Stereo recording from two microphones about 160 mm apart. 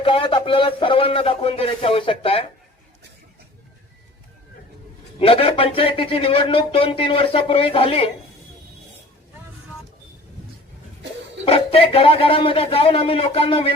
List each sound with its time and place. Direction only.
0.0 s speech: 35° left (ahead or behind)
5.2 s speech: 35° left (ahead or behind)
11.4 s speech: 35° left (ahead or behind)